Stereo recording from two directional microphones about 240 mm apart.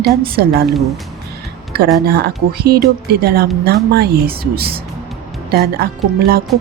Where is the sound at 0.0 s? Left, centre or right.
Right.